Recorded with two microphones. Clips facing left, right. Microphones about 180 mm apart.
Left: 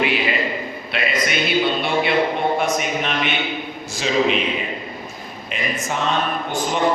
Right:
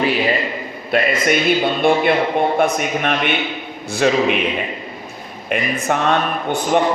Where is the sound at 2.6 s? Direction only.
55° right (ahead or behind).